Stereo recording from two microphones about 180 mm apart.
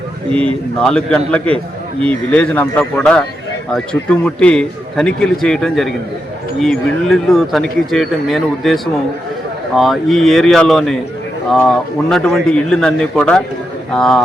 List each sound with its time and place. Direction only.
0.3 s speech: 30° right (ahead or behind)
0.8 s a man's voice: 5° left (ahead or behind)